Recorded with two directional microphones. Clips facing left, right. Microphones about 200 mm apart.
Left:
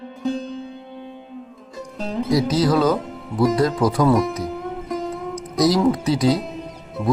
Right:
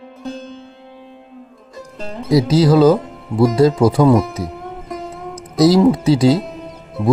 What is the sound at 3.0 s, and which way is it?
Speech, centre (ahead or behind).